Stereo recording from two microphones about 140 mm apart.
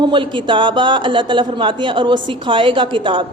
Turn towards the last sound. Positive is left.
turn(degrees=-35)  # may be behind; listen again after turning